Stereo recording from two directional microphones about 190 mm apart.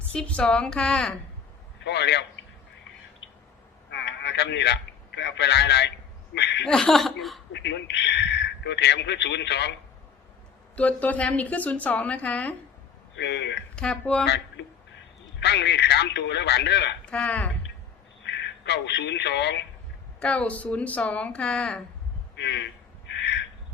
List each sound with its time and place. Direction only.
0.1 s a woman's voice: 5° left (ahead or behind)
1.8 s speech: 60° left (ahead or behind)
4.2 s a man's voice: 65° left (ahead or behind)
6.7 s a woman's voice: 5° left (ahead or behind)
7.5 s a man's voice: 65° left (ahead or behind)
10.8 s a woman's voice: 5° left (ahead or behind)
13.1 s a man's voice: 65° left (ahead or behind)
13.7 s a woman's voice: 5° left (ahead or behind)
14.3 s speech: 65° left (ahead or behind)
17.1 s a woman's voice: 5° left (ahead or behind)
18.3 s speech: 65° left (ahead or behind)
20.1 s a woman's voice: 5° left (ahead or behind)
22.4 s a man's voice: 70° left (ahead or behind)